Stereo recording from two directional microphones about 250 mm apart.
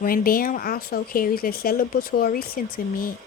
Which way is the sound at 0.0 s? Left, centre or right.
Left.